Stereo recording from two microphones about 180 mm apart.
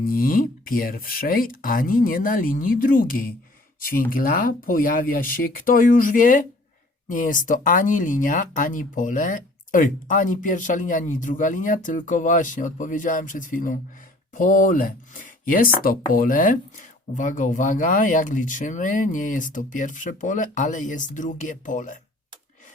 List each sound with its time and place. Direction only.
0.0 s speech: 55° left (ahead or behind)